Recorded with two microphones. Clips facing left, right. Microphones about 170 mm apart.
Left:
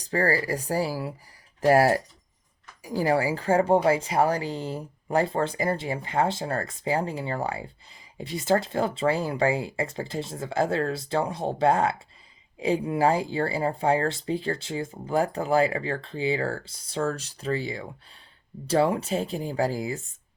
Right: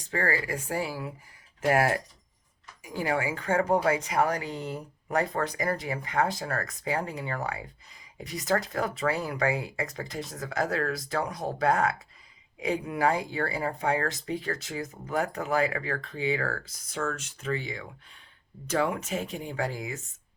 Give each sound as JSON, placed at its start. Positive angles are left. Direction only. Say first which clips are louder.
{"t": 0.0, "sound": "speech", "louder": "left 5 dB", "side_deg": 35}